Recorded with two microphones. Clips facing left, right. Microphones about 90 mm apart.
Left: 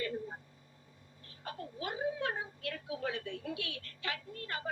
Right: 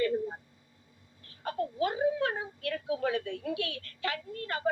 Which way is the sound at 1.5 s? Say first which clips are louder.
Right 10 dB; 65° right (ahead or behind).